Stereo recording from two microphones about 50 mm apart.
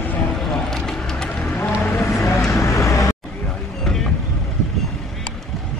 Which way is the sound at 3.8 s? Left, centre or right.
Centre.